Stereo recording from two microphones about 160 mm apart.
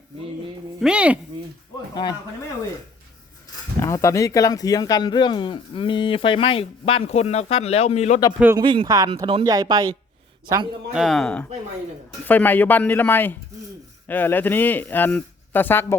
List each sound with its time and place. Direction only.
0.8 s speech: 5° right (ahead or behind)
2.0 s speech: 30° left (ahead or behind)
3.8 s speech: 20° left (ahead or behind); by 8.2 s 45° left (ahead or behind)
8.5 s speech: 30° right (ahead or behind)
10.9 s a man's voice: centre (ahead or behind)